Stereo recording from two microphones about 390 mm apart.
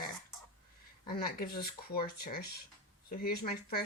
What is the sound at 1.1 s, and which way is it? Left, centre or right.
Speech, left.